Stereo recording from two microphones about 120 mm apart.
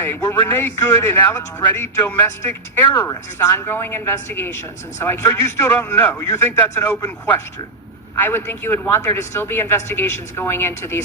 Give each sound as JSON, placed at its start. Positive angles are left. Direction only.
{"t": 0.0, "sound": "speech", "side_deg": 20}